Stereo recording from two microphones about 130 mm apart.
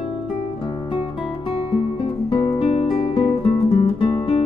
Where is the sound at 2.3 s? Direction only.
50° left (ahead or behind).